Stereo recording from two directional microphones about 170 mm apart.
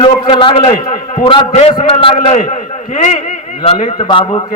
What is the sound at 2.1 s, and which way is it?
Speech, 50° left (ahead or behind).